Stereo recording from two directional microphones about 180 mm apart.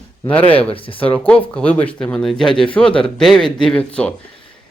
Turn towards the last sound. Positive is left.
turn(degrees=5)  # may be behind; listen again after turning